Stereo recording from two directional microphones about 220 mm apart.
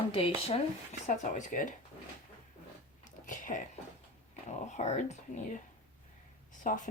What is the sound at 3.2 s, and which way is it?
Speech, 35° left (ahead or behind).